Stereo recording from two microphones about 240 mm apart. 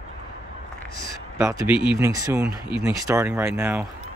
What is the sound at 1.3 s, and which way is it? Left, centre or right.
Speech, centre.